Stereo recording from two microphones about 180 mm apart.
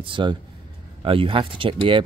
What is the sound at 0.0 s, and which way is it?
Speech, 25° right (ahead or behind).